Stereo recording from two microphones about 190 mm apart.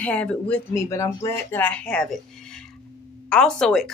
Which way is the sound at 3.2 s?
5° left (ahead or behind).